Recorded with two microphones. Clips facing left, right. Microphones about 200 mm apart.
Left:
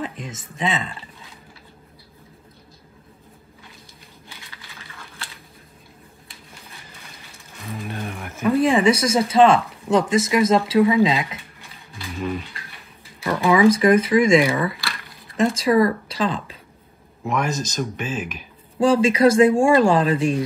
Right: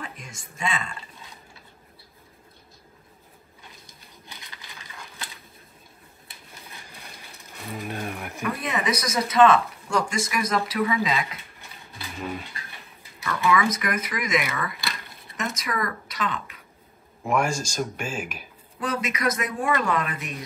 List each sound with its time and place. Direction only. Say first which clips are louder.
0.3 s speech: left 3 dB; 25° left (ahead or behind)
4.3 s a sound: even; 15° right (ahead or behind)
7.6 s speech: left 2 dB; centre (ahead or behind)
8.5 s speech: left 11 dB; 30° left (ahead or behind)
13.3 s speech: left 8 dB; 30° left (ahead or behind)
17.3 s speech: left 1 dB; 10° right (ahead or behind)
18.8 s speech: left 13 dB; 30° left (ahead or behind)